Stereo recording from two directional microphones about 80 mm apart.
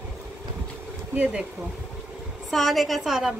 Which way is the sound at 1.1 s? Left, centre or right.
Centre.